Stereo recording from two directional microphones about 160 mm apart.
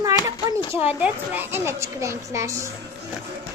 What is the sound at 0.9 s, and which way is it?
A woman's voice, 10° right (ahead or behind).